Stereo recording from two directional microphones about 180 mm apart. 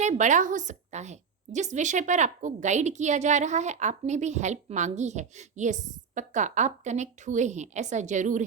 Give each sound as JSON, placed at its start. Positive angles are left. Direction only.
{"t": 0.0, "sound": "a woman's voice", "side_deg": -40}